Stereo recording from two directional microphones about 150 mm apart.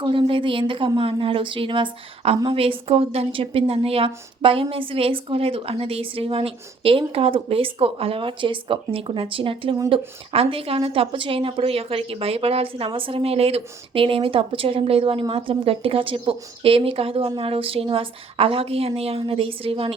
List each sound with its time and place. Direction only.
0.0 s a woman's voice: 35° right (ahead or behind)